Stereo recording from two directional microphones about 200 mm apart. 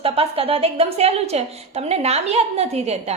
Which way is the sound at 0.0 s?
30° right (ahead or behind).